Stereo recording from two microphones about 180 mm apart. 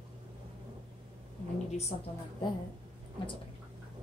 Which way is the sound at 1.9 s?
40° left (ahead or behind).